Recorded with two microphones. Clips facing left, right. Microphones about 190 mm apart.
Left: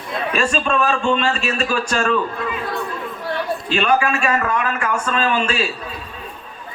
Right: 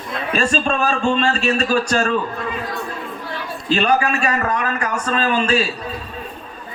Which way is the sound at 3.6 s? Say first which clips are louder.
Right 2 dB; 40° right (ahead or behind).